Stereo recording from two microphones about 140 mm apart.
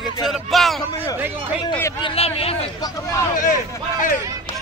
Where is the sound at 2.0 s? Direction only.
40° left (ahead or behind).